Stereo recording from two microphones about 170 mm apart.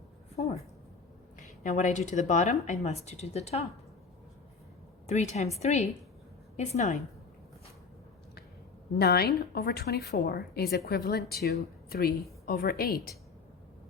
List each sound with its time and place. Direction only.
0.3 s a woman's voice: 40° left (ahead or behind)
5.0 s a woman's voice: 40° left (ahead or behind)
9.0 s a woman's voice: 70° left (ahead or behind)